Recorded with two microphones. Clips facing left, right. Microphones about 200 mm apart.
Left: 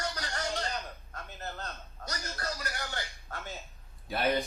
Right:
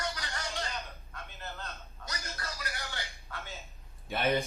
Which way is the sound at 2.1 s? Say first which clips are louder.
Left 4 dB; 40° left (ahead or behind).